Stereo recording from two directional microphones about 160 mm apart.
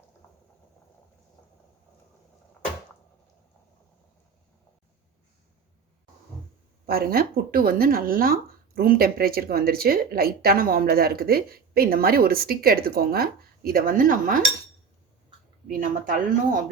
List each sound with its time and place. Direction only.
6.8 s speech: 70° right (ahead or behind)
15.6 s speech: 60° right (ahead or behind)